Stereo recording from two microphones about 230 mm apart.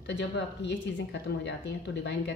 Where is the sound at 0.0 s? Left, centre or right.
Left.